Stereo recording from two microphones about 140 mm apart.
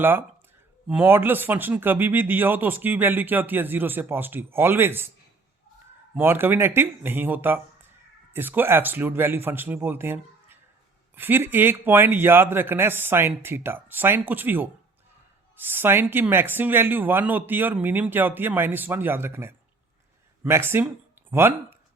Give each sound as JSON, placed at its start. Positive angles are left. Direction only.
{"t": 0.0, "sound": "speech", "side_deg": -15}
{"t": 6.1, "sound": "speech", "side_deg": -15}